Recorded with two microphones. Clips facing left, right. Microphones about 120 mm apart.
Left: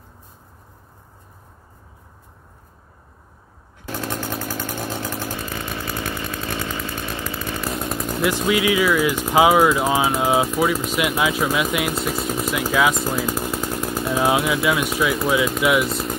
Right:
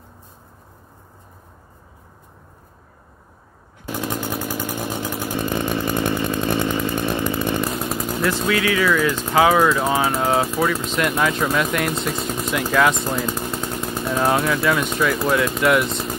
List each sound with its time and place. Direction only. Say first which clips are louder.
3.9 s vehicle: right 2 dB; 10° right (ahead or behind)
5.5 s chainsaw: right 7 dB; 20° right (ahead or behind)
7.7 s chainsaw: right 1 dB; centre (ahead or behind)
8.3 s speech: left 2 dB; 15° left (ahead or behind)